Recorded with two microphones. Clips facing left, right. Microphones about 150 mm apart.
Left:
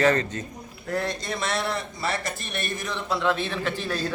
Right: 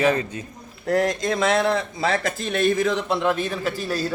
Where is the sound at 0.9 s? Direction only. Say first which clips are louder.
Right 7 dB; 90° right.